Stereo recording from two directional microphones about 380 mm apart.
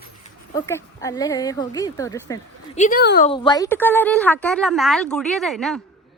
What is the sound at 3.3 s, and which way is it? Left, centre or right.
A woman's voice, centre.